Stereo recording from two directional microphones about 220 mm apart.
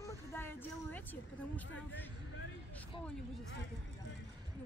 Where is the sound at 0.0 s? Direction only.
10° left (ahead or behind).